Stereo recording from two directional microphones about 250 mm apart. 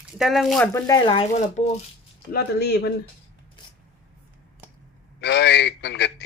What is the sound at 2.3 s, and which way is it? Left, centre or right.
Speech, left.